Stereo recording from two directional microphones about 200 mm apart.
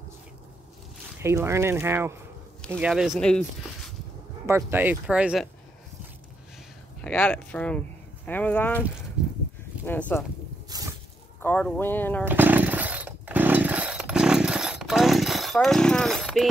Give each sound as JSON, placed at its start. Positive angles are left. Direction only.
{"t": 1.2, "sound": "speech", "side_deg": -15}
{"t": 4.5, "sound": "speech", "side_deg": -15}
{"t": 7.0, "sound": "speech", "side_deg": 5}
{"t": 9.8, "sound": "speech", "side_deg": 10}
{"t": 10.7, "sound": "drip", "side_deg": -20}
{"t": 11.4, "sound": "speech", "side_deg": 5}
{"t": 12.3, "sound": "chainsaw", "side_deg": -10}